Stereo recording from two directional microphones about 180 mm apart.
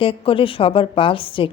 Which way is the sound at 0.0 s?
30° left (ahead or behind).